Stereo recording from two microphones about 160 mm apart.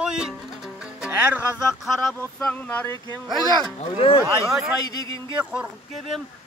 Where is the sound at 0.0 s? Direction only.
5° right (ahead or behind).